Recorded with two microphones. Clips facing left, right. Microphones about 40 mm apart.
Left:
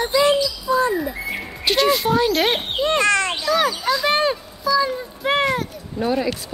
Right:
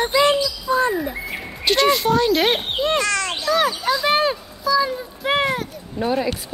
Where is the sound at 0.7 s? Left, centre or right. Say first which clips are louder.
Even; right.